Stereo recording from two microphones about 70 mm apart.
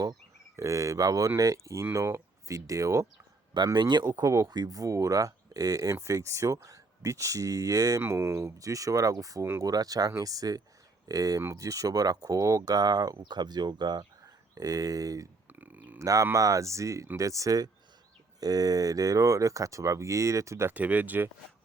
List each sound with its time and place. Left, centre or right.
0.5 s speech: right
2.6 s speech: right
3.8 s speech: right
4.0 s speech: right
4.5 s speech: right
8.0 s speech: right
14.5 s speech: right
15.4 s a sound: right
16.0 s speech: right
18.3 s speech: right
20.7 s speech: right